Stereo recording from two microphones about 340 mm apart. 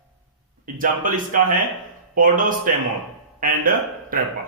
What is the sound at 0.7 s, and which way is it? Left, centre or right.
A man's voice, right.